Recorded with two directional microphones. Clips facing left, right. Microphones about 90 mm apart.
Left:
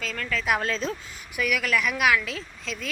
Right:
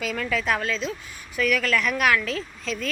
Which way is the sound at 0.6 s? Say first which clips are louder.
Even; 40° left (ahead or behind).